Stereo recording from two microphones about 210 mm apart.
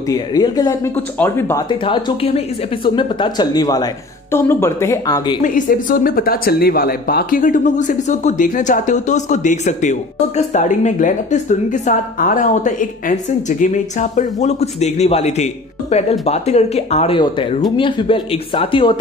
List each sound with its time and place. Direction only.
0.1 s speech: 15° left (ahead or behind)
1.9 s speech: 25° left (ahead or behind)
5.4 s speech: 40° left (ahead or behind); by 18.9 s 25° left (ahead or behind)